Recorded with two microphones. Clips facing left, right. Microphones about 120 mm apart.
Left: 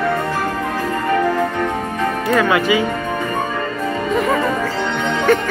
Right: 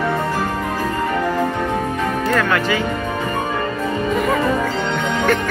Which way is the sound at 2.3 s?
10° left (ahead or behind).